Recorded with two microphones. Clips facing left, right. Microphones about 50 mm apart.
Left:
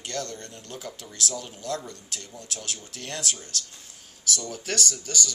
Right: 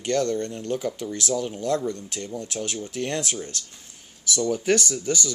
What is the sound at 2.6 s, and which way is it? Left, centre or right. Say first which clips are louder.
Speech: right 11 dB; right.